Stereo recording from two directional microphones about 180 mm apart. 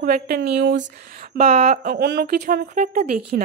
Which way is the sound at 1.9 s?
55° right (ahead or behind).